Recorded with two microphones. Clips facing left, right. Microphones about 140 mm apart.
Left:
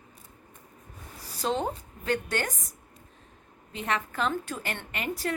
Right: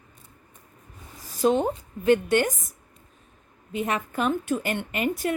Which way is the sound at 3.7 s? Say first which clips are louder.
Right 4 dB; 15° right (ahead or behind).